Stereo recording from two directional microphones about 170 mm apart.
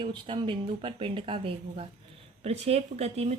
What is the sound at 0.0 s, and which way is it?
Speech, 30° right (ahead or behind).